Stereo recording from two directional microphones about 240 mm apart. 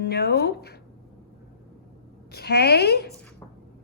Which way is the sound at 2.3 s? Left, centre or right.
Left.